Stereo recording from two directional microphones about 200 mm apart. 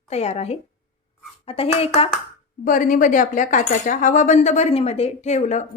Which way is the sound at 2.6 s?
40° left (ahead or behind).